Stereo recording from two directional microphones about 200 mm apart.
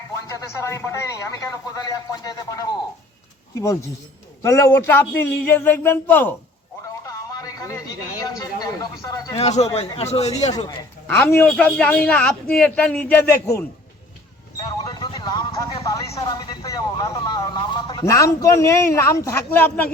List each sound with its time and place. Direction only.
0.3 s speech: 15° left (ahead or behind)
4.4 s speech: 15° left (ahead or behind)
7.0 s a sound: 15° left (ahead or behind)
9.4 s speech: 30° left (ahead or behind)
11.4 s speech: 5° left (ahead or behind)
14.6 s a sound: 20° left (ahead or behind)
19.5 s speech: 10° left (ahead or behind)